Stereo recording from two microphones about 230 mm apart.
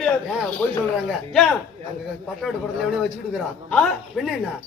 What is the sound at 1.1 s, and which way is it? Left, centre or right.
Speech, centre.